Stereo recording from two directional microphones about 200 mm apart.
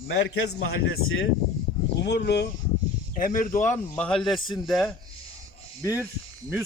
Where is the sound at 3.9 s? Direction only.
5° left (ahead or behind).